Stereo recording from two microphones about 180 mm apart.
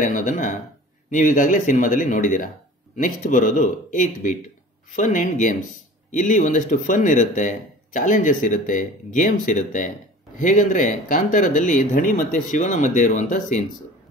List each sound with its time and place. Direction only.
0.0 s speech: 45° left (ahead or behind)